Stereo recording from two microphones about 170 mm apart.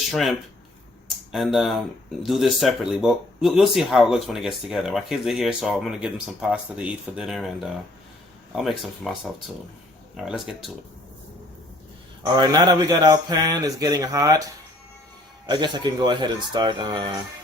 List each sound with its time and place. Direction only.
0.1 s speech: centre (ahead or behind)
12.2 s speech: 20° right (ahead or behind)
15.4 s speech: 25° right (ahead or behind)